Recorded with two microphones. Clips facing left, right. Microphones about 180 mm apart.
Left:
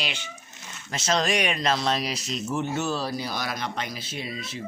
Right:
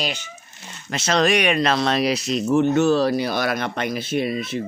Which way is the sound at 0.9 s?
70° right (ahead or behind).